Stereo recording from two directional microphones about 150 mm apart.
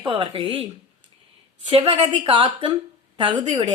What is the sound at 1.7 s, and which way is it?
A woman's voice, 35° right (ahead or behind).